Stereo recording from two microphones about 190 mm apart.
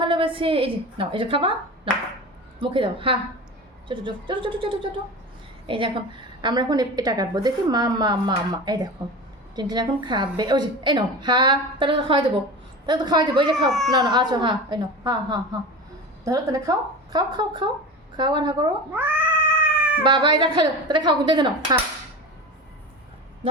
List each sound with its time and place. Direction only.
0.0 s a woman's voice: 25° right (ahead or behind)
13.7 s speech: centre (ahead or behind)
13.9 s a woman's voice: 20° right (ahead or behind)
18.9 s cat: 10° right (ahead or behind)
20.0 s a woman's voice: 25° right (ahead or behind)